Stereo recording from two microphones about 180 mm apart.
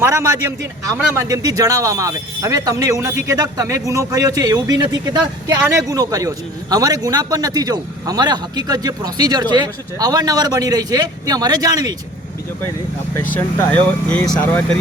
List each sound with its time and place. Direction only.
0.0 s a man's voice: 15° right (ahead or behind)
13.1 s speech: 10° left (ahead or behind)